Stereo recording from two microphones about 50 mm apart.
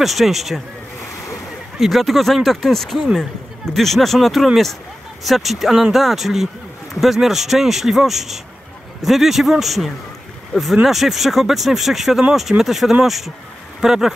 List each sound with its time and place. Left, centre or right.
0.0 s speech: centre
1.8 s speech: centre